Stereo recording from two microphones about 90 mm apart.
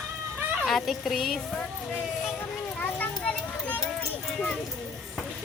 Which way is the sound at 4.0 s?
5° left (ahead or behind).